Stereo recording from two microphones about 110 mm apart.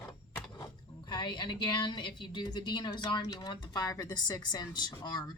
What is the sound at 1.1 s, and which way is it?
A woman's voice, 45° left (ahead or behind).